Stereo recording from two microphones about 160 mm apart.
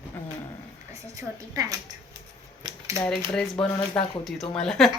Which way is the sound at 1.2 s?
20° right (ahead or behind).